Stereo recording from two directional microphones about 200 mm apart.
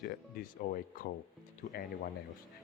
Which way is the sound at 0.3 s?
45° left (ahead or behind).